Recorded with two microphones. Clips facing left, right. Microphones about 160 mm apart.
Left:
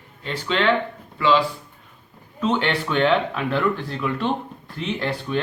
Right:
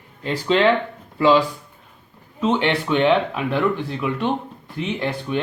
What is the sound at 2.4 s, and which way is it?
Speech, 20° right (ahead or behind).